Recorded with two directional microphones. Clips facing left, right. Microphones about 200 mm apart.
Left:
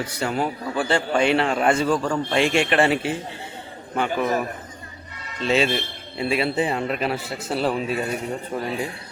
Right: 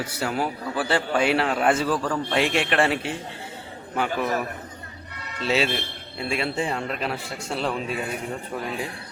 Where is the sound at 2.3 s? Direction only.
Centre (ahead or behind).